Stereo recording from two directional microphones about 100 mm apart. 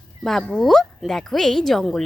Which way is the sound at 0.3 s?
5° left (ahead or behind).